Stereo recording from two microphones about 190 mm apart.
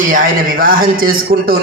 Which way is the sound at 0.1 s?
50° right (ahead or behind).